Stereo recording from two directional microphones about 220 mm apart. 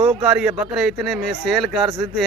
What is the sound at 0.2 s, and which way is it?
Speech, 5° right (ahead or behind).